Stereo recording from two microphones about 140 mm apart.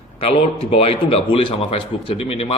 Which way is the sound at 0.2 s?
45° left (ahead or behind).